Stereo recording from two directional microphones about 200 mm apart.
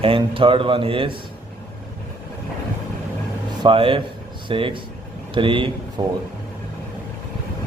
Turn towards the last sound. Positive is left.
turn(degrees=-25)  # may be behind; listen again after turning